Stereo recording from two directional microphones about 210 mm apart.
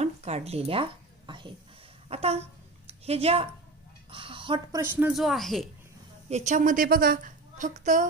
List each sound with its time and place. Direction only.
0.0 s a sound: 30° right (ahead or behind)
2.0 s speech: 30° right (ahead or behind)
4.9 s speech: 5° right (ahead or behind)
6.2 s a woman's voice: 35° right (ahead or behind)